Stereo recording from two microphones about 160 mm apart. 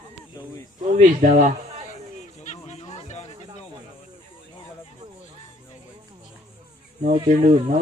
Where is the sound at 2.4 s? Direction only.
50° left (ahead or behind).